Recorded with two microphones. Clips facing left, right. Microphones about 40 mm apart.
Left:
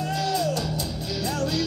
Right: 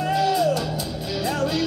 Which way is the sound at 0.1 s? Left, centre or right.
Centre.